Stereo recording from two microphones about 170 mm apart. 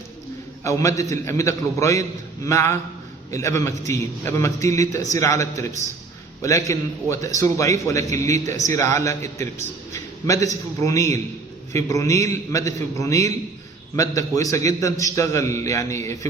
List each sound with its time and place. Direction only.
0.6 s a man's voice: 20° left (ahead or behind)
9.9 s a sound: 20° left (ahead or behind)
10.8 s a man's voice: 20° left (ahead or behind)